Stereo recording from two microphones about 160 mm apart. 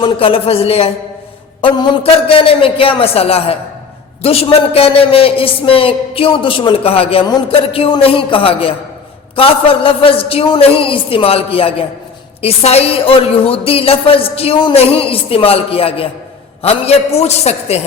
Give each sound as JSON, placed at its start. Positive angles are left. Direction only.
{"t": 0.0, "sound": "a woman's voice", "side_deg": 30}